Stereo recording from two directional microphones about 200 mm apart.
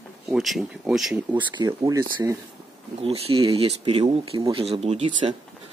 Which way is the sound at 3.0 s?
30° right (ahead or behind).